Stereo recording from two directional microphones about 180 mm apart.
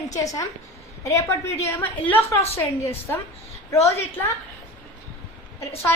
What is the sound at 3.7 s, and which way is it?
Speech, 15° left (ahead or behind).